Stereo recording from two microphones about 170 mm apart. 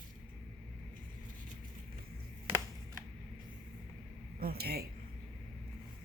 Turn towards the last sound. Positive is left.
turn(degrees=-65)  # may be behind; listen again after turning